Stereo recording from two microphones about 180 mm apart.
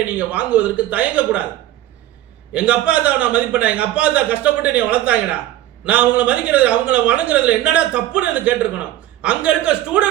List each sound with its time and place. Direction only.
0.1 s a man's voice: 10° right (ahead or behind)
2.5 s a man's voice: 5° right (ahead or behind)